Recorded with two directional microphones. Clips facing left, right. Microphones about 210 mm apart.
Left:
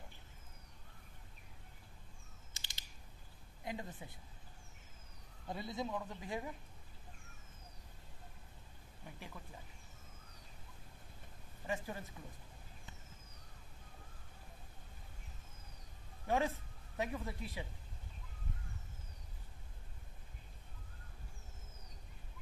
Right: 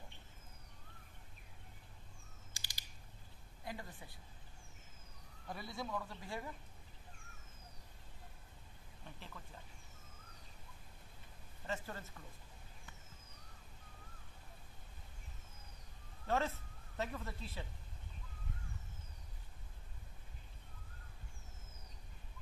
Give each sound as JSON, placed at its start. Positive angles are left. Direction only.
{"t": 2.5, "sound": "mechanisms", "side_deg": 20}
{"t": 3.6, "sound": "speech", "side_deg": 20}
{"t": 5.5, "sound": "speech", "side_deg": 20}
{"t": 9.0, "sound": "speech", "side_deg": 10}
{"t": 11.6, "sound": "speech", "side_deg": 15}
{"t": 16.3, "sound": "speech", "side_deg": 15}